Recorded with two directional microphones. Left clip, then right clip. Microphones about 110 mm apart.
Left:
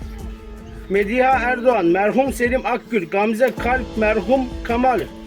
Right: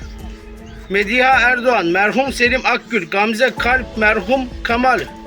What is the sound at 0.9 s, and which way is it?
Speech, 40° left (ahead or behind).